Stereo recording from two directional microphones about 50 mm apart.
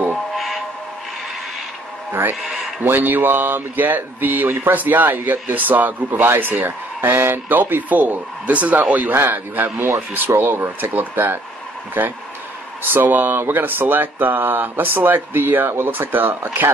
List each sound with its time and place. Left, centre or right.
2.8 s speech: right
6.2 s speech: right
9.1 s a man's voice: right
9.8 s speech: right